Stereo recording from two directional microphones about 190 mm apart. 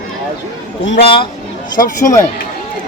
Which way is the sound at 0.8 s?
60° left (ahead or behind).